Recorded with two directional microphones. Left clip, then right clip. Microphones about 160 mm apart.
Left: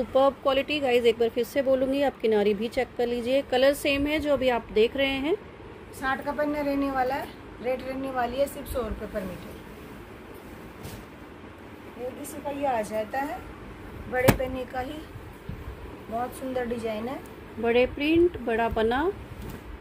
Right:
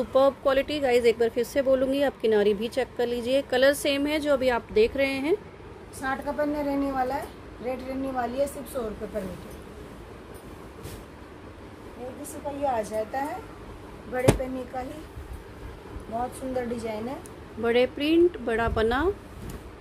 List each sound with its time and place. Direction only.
0.1 s speech: 5° right (ahead or behind)
6.0 s speech: 20° right (ahead or behind)
12.6 s speech: 10° right (ahead or behind)
16.2 s speech: 10° right (ahead or behind)
17.6 s speech: centre (ahead or behind)